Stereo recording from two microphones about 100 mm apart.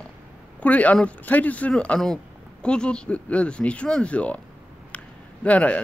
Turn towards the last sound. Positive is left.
turn(degrees=15)  # may be behind; listen again after turning